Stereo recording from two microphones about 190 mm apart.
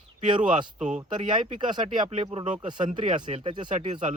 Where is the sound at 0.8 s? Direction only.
40° right (ahead or behind).